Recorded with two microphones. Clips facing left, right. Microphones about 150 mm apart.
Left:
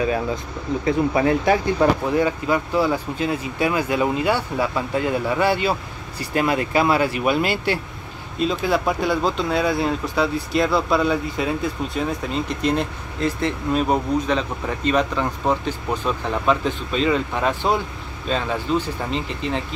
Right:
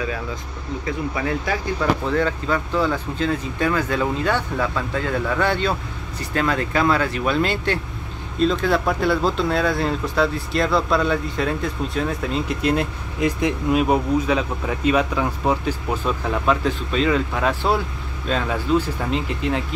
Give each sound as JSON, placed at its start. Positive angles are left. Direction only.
{"t": 0.8, "sound": "speech", "side_deg": 30}
{"t": 2.0, "sound": "speech", "side_deg": 15}